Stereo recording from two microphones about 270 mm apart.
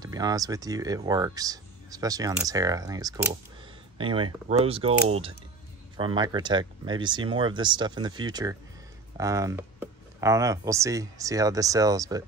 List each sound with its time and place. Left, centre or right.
0.0 s speech: centre
5.9 s speech: centre